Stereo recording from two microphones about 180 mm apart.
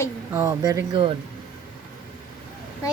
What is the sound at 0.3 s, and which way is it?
Speech, 15° right (ahead or behind).